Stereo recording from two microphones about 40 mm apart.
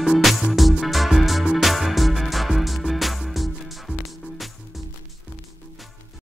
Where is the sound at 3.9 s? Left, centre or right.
Right.